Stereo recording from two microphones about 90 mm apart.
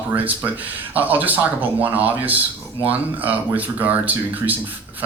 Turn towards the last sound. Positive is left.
turn(degrees=-20)  # may be behind; listen again after turning